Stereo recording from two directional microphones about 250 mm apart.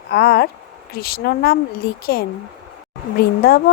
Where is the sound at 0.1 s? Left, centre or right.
Left.